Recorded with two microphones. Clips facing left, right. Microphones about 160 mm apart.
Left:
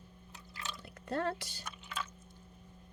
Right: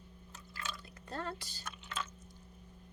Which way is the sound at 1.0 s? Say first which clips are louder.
Left 6 dB; 60° left (ahead or behind).